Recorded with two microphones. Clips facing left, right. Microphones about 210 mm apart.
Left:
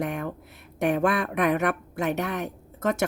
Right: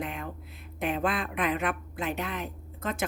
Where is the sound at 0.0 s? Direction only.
70° left (ahead or behind).